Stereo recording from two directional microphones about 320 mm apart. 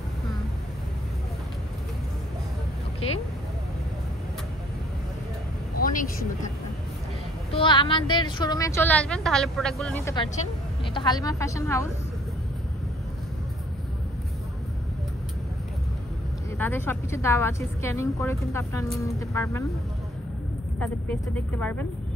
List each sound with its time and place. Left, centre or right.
3.0 s speech: centre
5.8 s speech: left
7.5 s a woman's voice: centre
16.5 s a woman's voice: centre
20.8 s speech: centre